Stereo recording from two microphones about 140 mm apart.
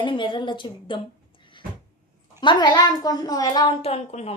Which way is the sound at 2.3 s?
35° left (ahead or behind).